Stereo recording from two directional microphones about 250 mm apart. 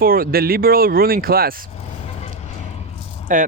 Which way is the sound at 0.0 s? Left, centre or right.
Right.